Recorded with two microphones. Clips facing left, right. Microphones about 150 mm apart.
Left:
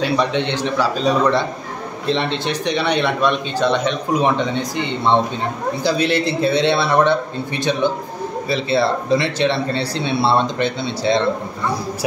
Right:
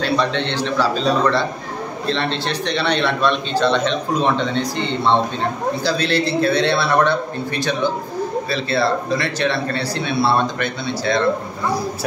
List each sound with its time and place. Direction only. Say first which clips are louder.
0.0 s a man's voice: left 1 dB; 15° left (ahead or behind)